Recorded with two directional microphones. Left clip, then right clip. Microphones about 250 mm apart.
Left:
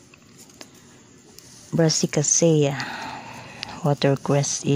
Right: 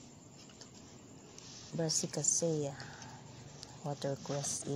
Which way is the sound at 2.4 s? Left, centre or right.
Left.